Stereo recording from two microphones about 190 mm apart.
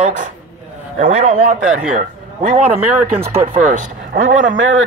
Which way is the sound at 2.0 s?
40° right (ahead or behind).